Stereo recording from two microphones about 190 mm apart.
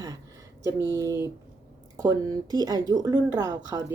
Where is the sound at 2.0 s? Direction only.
20° right (ahead or behind).